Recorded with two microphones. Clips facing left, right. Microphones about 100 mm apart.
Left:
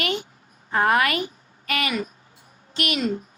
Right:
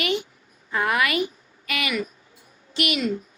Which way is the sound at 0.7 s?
40° left (ahead or behind).